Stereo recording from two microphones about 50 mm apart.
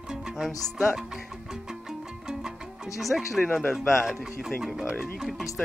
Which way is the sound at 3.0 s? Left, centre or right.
Centre.